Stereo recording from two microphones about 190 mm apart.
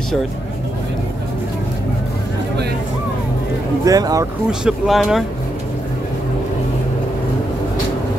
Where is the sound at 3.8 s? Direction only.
20° right (ahead or behind).